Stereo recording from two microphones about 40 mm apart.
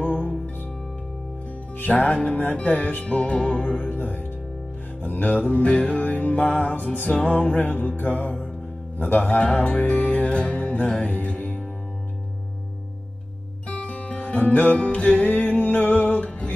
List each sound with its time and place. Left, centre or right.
0.0 s music: left
1.9 s music: left
2.6 s music: left
3.9 s music: left
7.6 s music: left
13.7 s music: left
16.3 s music: left